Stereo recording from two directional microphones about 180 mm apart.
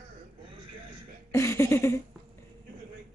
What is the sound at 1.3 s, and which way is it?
Speech, 15° left (ahead or behind).